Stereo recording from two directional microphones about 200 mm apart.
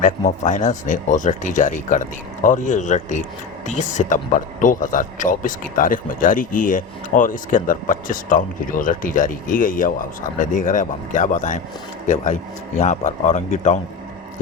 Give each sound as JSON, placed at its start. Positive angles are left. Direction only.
{"t": 0.0, "sound": "speech", "side_deg": 40}